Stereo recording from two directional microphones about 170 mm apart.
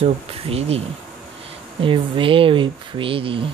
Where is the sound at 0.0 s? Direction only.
35° right (ahead or behind).